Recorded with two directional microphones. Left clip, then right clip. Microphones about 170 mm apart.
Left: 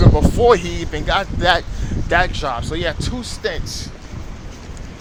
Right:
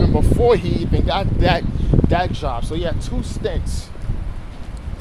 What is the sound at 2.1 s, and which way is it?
Speech, centre (ahead or behind).